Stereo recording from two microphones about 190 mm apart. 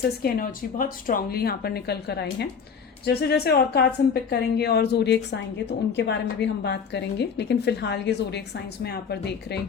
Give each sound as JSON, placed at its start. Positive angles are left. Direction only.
{"t": 0.2, "sound": "a woman's voice", "side_deg": 45}